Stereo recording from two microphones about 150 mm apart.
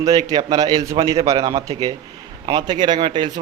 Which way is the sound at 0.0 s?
25° right (ahead or behind).